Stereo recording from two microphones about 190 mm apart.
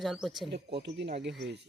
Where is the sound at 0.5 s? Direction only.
60° right (ahead or behind).